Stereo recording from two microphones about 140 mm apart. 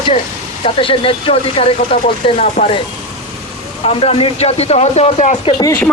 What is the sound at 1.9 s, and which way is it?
Speech, 60° left (ahead or behind).